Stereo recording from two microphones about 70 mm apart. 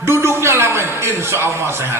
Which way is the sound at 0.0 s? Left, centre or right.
Right.